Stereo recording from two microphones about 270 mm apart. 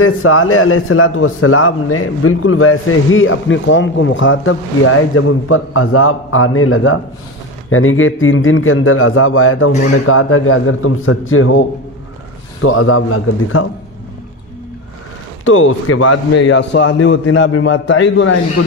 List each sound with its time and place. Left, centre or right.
0.0 s a man's voice: left
12.6 s a man's voice: left
15.4 s a man's voice: left